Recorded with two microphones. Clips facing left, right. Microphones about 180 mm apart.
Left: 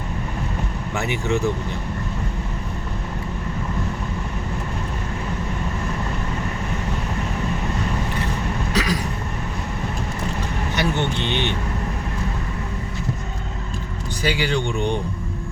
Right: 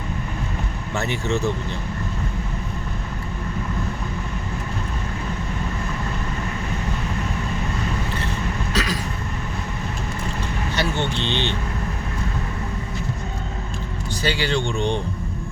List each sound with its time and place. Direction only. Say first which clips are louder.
0.9 s speech: left 1 dB; 15° left (ahead or behind)
8.7 s a sound: left 3 dB; 15° left (ahead or behind)
10.8 s speech: left 2 dB; 15° left (ahead or behind)
14.2 s speech: left 1 dB; 15° left (ahead or behind)